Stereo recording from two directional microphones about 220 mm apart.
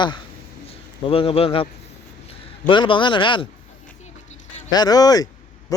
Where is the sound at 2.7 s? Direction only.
20° left (ahead or behind).